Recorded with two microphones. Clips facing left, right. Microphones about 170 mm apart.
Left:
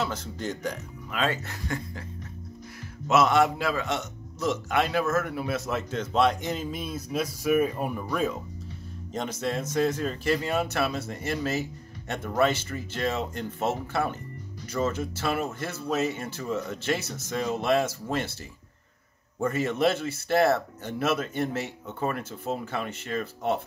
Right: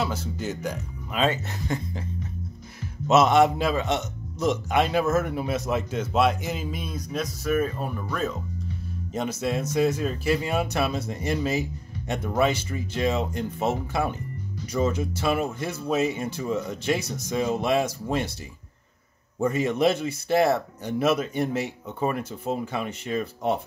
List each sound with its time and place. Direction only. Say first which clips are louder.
0.0 s a man's voice: right 2 dB; 10° right (ahead or behind)
1.1 s speech: right 4 dB; 20° right (ahead or behind)
3.1 s a man's voice: right 3 dB; 20° right (ahead or behind); by 8.4 s 10° left (ahead or behind)
9.1 s a man's voice: right 3 dB; 5° right (ahead or behind)
19.4 s a man's voice: right 3 dB; 15° right (ahead or behind)